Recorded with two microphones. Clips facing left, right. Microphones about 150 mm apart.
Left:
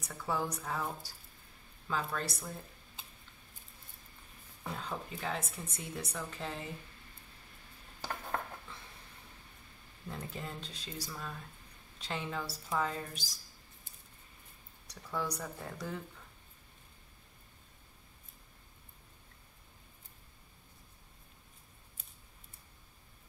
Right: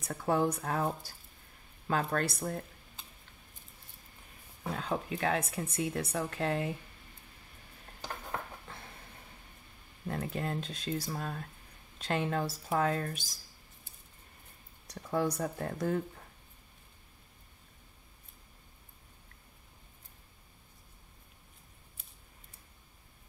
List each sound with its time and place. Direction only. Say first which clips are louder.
0.1 s speech: right 7 dB; 55° right (ahead or behind)
1.9 s speech: right 5 dB; 60° right (ahead or behind)
4.7 s a woman's voice: right 8 dB; 70° right (ahead or behind)
10.0 s speech: right 7 dB; 60° right (ahead or behind)
14.9 s speech: right 6 dB; 50° right (ahead or behind)